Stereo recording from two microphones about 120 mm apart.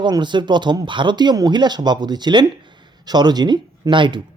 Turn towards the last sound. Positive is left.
turn(degrees=-40)  # may be behind; listen again after turning